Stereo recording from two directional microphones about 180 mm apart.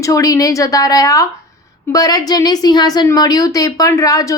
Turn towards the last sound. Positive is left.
turn(degrees=20)  # may be behind; listen again after turning